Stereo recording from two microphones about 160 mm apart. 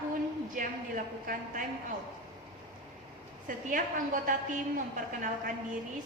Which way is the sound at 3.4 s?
55° right (ahead or behind).